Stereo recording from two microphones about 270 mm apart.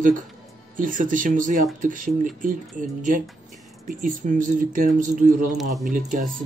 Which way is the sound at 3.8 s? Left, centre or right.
Right.